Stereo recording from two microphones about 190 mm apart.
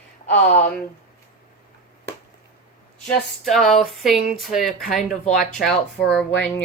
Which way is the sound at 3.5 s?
Centre (ahead or behind).